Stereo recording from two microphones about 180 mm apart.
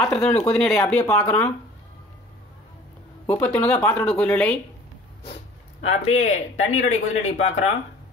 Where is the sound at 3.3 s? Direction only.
10° left (ahead or behind).